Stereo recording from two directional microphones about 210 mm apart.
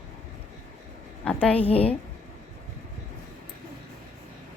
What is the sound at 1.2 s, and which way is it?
Speech, 5° left (ahead or behind).